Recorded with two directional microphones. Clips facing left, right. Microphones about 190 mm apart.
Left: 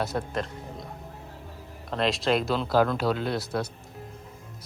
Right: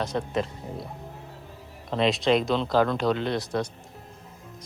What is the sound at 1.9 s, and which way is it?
Speech, centre (ahead or behind).